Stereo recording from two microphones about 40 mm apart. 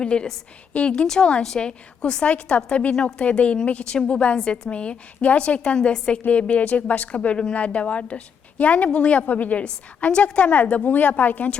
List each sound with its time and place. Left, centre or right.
0.0 s a woman's voice: left
2.2 s a woman's voice: left
4.4 s a woman's voice: centre
4.7 s a woman's voice: left
6.2 s a woman's voice: left
9.2 s a woman's voice: left
10.0 s a woman's voice: left